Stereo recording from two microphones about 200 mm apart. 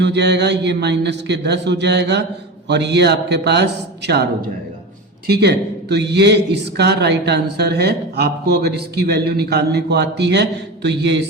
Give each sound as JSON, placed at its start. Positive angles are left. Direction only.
{"t": 0.0, "sound": "a man's voice", "side_deg": -60}
{"t": 5.2, "sound": "a man's voice", "side_deg": -55}